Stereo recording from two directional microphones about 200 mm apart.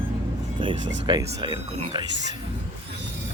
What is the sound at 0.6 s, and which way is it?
Speech, 25° right (ahead or behind).